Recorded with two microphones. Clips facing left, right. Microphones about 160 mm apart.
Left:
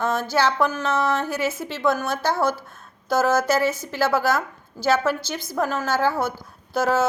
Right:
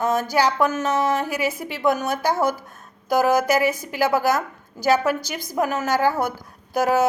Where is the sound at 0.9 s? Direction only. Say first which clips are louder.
Right 1 dB; 15° right (ahead or behind).